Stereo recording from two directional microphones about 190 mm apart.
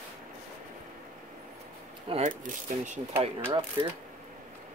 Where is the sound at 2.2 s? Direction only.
40° right (ahead or behind).